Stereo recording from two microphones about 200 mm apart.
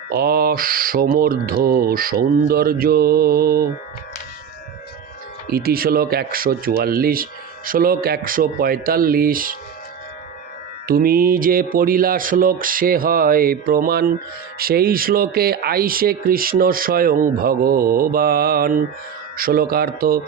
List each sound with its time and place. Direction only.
0.1 s speech: 50° right (ahead or behind)
5.5 s speech: 50° right (ahead or behind)
10.8 s speech: 45° right (ahead or behind)